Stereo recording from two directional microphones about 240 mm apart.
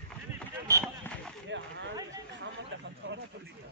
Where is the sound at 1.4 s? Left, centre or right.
Right.